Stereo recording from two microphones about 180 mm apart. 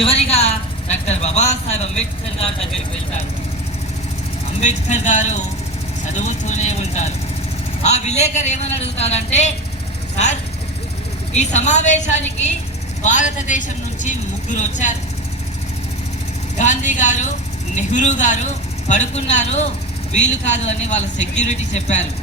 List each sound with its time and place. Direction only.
0.0 s a sound: 35° left (ahead or behind)
1.0 s speech: 40° left (ahead or behind)
4.6 s speech: 40° left (ahead or behind)
11.3 s speech: 40° left (ahead or behind)
16.6 s speech: 40° left (ahead or behind)